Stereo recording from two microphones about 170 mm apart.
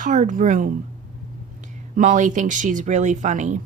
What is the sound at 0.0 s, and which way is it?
Speech, 50° right (ahead or behind).